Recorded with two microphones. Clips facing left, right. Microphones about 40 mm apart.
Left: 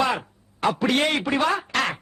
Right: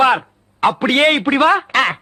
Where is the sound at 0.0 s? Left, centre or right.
Right.